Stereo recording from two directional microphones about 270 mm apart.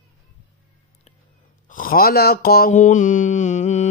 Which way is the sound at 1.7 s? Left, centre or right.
Left.